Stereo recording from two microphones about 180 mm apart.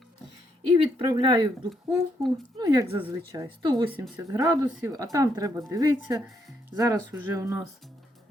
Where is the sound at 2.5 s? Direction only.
25° right (ahead or behind).